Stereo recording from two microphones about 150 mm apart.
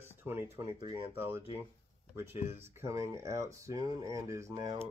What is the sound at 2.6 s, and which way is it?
Speech, 20° right (ahead or behind).